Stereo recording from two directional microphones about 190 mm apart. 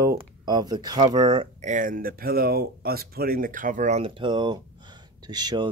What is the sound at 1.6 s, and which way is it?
Speech, 40° right (ahead or behind).